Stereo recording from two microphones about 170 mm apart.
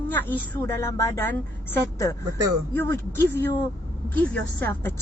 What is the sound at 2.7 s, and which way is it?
A woman's voice, 10° left (ahead or behind).